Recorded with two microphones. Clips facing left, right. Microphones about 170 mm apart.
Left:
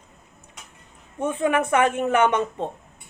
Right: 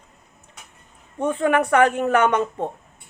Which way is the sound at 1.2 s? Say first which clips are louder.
Right 2 dB; 20° left (ahead or behind).